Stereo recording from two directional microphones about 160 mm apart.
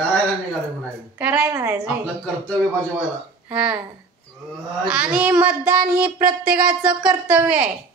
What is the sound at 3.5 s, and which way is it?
Speech, 5° right (ahead or behind).